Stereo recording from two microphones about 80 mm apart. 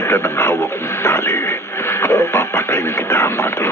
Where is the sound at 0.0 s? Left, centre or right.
Left.